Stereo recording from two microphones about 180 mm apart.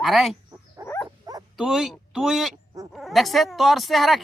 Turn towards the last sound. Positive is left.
turn(degrees=0)  # may be behind; listen again after turning